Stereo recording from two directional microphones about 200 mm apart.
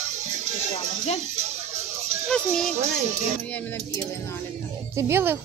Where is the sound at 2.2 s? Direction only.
Centre (ahead or behind).